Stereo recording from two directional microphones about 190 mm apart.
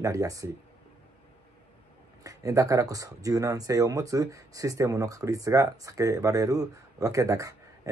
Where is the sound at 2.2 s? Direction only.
20° right (ahead or behind).